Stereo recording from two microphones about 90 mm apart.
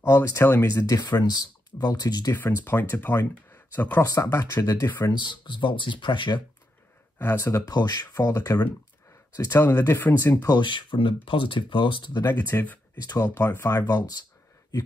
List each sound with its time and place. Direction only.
0.0 s speech: 30° left (ahead or behind)
0.7 s speech: 45° left (ahead or behind)
2.3 s speech: 25° left (ahead or behind)
4.0 s speech: 35° left (ahead or behind)
4.8 s speech: 25° left (ahead or behind)
5.1 s speech: 55° left (ahead or behind)
7.2 s speech: 25° left (ahead or behind)
7.7 s speech: 45° left (ahead or behind)
9.4 s speech: 30° left (ahead or behind)
10.4 s speech: 55° left (ahead or behind)
12.3 s speech: 20° left (ahead or behind)
13.0 s speech: 45° left (ahead or behind)
13.3 s speech: 25° left (ahead or behind)
13.7 s speech: 45° left (ahead or behind)